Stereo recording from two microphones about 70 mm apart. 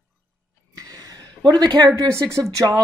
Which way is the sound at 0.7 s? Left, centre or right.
Right.